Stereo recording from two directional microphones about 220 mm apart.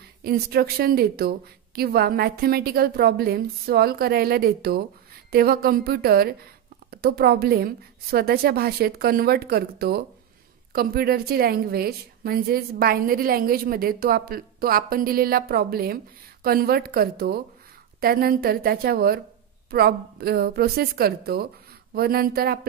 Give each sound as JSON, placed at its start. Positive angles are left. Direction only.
{"t": 0.2, "sound": "a woman's voice", "side_deg": -45}